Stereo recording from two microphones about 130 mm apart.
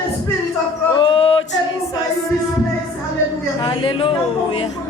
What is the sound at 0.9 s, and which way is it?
Speech, 40° left (ahead or behind).